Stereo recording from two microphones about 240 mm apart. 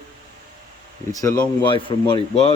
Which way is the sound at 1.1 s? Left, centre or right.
Centre.